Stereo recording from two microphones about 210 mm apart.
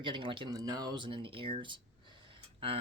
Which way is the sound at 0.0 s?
25° right (ahead or behind).